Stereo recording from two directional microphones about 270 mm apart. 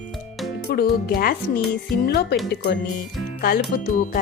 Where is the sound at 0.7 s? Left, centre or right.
Left.